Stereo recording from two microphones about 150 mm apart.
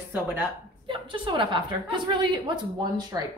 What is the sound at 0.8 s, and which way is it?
A woman's voice, 35° right (ahead or behind).